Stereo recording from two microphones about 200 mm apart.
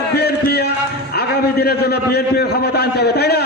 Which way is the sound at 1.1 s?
50° left (ahead or behind).